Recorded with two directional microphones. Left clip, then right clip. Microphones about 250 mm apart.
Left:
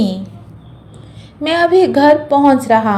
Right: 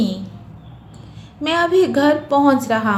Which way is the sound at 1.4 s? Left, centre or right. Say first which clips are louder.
Left 4 dB; centre.